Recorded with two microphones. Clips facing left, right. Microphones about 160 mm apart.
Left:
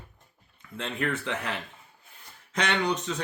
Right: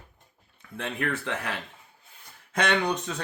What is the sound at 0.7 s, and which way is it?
Speech, 65° right (ahead or behind).